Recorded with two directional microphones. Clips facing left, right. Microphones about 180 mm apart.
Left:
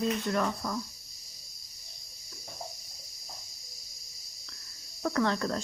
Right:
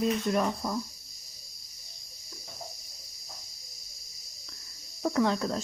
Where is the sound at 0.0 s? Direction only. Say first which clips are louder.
Right 2 dB; 15° right (ahead or behind).